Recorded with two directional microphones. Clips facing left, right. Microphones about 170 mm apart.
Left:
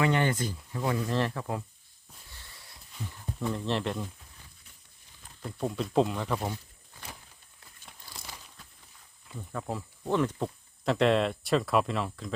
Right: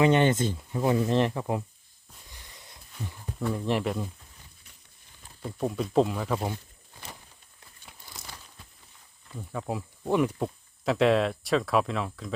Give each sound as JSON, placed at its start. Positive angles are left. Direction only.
{"t": 0.0, "sound": "speech", "side_deg": -20}
{"t": 2.3, "sound": "a sound", "side_deg": -15}
{"t": 3.4, "sound": "speech", "side_deg": -10}
{"t": 5.4, "sound": "speech", "side_deg": -5}
{"t": 8.1, "sound": "a sound", "side_deg": 0}
{"t": 9.3, "sound": "speech", "side_deg": -5}